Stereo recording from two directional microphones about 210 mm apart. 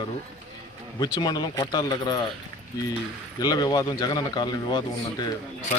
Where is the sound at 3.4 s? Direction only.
20° left (ahead or behind).